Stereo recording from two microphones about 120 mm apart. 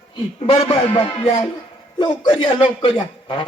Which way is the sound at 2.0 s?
40° left (ahead or behind).